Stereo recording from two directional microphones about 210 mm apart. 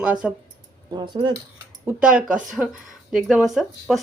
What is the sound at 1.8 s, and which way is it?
A woman's voice, 5° right (ahead or behind).